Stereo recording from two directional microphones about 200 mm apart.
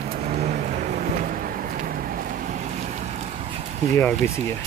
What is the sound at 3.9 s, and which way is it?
Speech, 10° left (ahead or behind).